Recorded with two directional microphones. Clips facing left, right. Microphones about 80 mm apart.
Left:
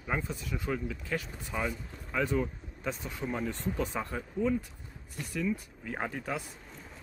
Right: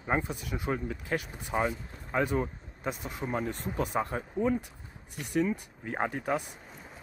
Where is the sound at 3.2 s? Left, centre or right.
Right.